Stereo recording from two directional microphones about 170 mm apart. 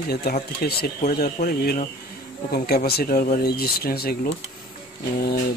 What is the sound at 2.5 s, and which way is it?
Speech, 65° left (ahead or behind).